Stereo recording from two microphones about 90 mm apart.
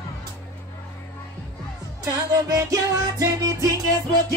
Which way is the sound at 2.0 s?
40° right (ahead or behind).